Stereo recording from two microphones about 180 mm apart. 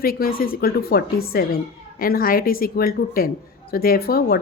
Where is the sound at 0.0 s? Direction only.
55° left (ahead or behind).